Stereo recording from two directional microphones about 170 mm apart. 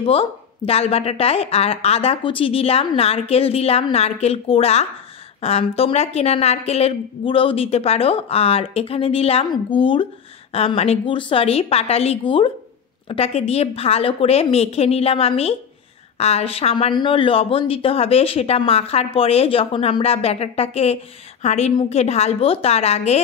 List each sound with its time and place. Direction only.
0.0 s speech: 35° left (ahead or behind)